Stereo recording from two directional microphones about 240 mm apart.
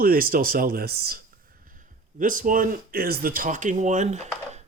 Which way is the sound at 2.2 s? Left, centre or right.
Right.